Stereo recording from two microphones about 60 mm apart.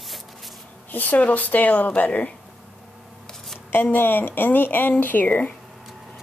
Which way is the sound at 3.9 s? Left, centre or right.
Left.